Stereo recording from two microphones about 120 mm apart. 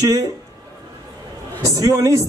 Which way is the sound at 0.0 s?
30° right (ahead or behind).